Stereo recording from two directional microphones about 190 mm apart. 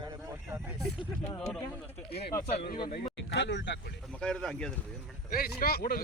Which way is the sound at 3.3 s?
70° left (ahead or behind).